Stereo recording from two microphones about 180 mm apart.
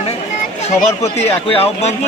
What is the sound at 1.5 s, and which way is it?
Speech, 35° left (ahead or behind).